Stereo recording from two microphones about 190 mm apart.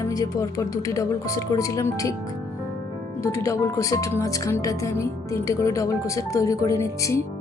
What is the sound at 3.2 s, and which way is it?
Speech, 15° left (ahead or behind).